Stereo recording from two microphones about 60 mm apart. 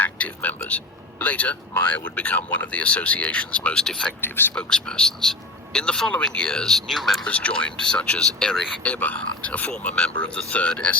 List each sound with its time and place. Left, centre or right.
0.0 s a sound: left
1.2 s speech: left
3.8 s speech: centre
4.2 s speech: left
4.5 s speech: centre
7.3 s speech: left
8.8 s speech: left